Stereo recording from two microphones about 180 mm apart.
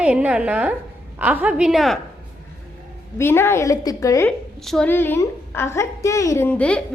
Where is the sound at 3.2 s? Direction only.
15° left (ahead or behind).